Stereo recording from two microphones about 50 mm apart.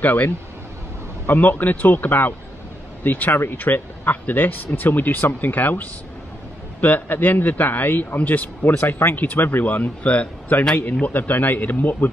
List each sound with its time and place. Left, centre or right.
0.0 s speech: left